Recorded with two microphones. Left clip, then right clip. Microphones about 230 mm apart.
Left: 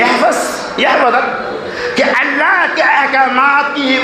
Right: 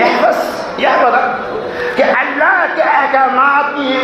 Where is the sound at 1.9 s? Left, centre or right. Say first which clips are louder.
Even; left.